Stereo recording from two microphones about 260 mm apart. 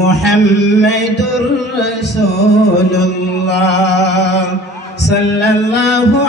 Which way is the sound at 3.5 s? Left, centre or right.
Left.